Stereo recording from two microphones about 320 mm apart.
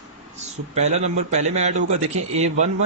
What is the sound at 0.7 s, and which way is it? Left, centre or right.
A man's voice, right.